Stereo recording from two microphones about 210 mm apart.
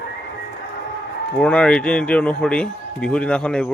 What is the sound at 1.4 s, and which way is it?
Speech, 5° left (ahead or behind).